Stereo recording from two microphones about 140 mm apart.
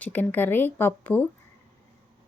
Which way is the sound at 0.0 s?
10° left (ahead or behind).